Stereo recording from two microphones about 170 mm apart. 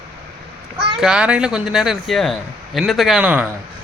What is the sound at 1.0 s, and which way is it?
Speech, 5° right (ahead or behind).